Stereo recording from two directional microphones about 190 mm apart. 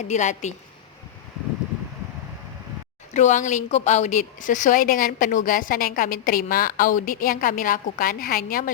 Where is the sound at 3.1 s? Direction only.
40° left (ahead or behind).